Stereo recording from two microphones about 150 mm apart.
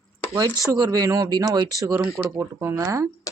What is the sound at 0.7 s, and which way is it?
Speech, 25° right (ahead or behind).